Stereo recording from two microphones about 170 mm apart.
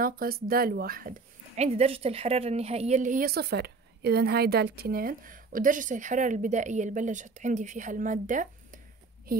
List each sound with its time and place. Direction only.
0.0 s speech: 60° right (ahead or behind)
9.3 s a woman's voice: 60° right (ahead or behind)